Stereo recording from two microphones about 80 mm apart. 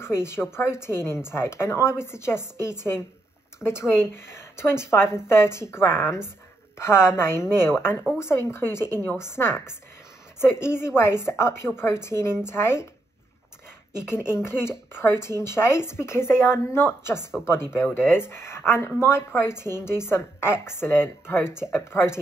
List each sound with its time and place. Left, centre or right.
0.0 s speech: left
13.9 s speech: left